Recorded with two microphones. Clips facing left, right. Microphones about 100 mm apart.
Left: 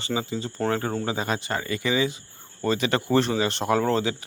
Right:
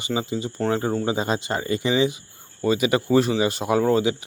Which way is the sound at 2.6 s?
10° right (ahead or behind).